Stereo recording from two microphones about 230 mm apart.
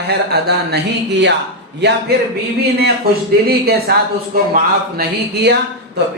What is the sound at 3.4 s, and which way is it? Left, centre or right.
Speech, right.